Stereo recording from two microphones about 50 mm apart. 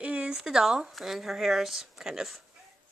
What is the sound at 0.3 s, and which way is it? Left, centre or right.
Speech, centre.